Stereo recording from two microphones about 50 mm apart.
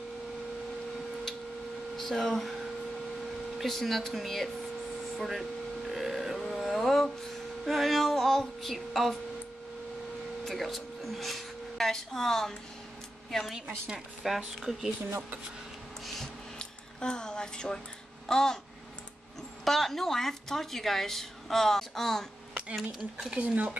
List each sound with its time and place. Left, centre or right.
2.0 s speech: centre
3.5 s speech: centre
5.9 s a sound: centre
7.6 s speech: centre
10.4 s speech: centre
16.5 s a sound: centre
18.3 s babbling: centre
19.6 s speech: centre
23.4 s speech: right